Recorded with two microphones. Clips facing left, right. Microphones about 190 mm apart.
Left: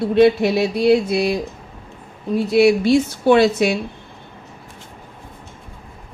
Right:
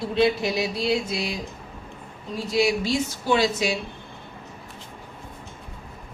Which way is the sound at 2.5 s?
60° left (ahead or behind).